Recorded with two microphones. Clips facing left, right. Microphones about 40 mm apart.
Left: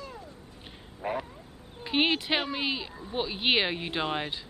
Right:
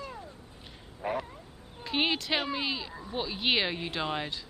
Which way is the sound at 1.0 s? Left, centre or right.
Centre.